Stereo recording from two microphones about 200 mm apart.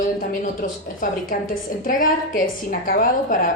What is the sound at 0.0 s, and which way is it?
A woman's voice, 40° left (ahead or behind).